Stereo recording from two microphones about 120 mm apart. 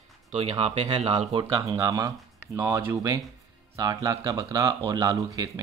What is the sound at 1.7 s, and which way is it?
Speech, 30° right (ahead or behind).